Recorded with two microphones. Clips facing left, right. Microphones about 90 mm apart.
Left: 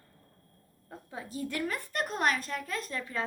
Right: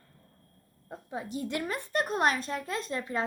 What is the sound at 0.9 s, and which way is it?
A woman's voice, 20° right (ahead or behind).